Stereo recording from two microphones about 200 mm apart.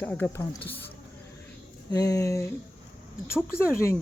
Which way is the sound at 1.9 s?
15° left (ahead or behind).